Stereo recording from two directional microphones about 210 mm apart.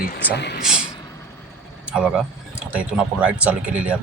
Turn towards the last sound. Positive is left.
turn(degrees=-5)  # may be behind; listen again after turning